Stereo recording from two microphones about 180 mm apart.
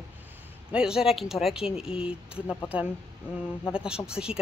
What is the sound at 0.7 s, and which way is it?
Speech, 5° right (ahead or behind).